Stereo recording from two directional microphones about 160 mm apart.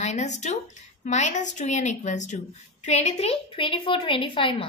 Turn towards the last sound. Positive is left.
turn(degrees=30)  # may be behind; listen again after turning